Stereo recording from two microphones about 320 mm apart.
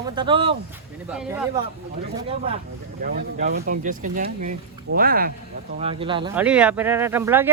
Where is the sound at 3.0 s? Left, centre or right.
Right.